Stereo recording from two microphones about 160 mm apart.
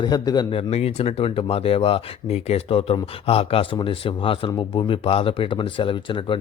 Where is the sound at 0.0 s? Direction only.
25° left (ahead or behind).